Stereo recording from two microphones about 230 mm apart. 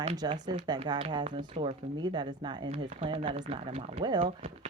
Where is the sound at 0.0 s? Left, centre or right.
Right.